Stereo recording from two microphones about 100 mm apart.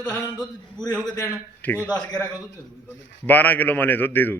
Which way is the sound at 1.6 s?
15° left (ahead or behind).